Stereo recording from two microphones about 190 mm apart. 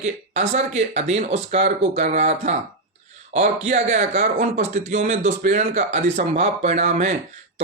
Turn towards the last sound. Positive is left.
turn(degrees=-35)  # may be behind; listen again after turning